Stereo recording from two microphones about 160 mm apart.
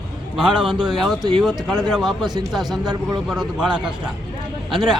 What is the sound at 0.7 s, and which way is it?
Speech, 30° right (ahead or behind).